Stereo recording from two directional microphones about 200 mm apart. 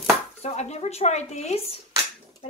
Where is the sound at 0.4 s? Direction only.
35° left (ahead or behind).